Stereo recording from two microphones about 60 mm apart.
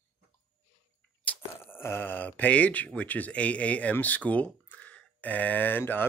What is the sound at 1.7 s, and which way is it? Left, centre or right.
Speech, left.